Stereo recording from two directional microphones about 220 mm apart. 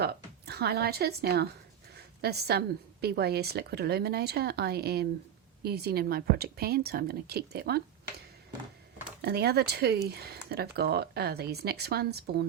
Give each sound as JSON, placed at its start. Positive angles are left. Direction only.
{"t": 0.0, "sound": "a woman's voice", "side_deg": -45}
{"t": 9.2, "sound": "a woman's voice", "side_deg": -45}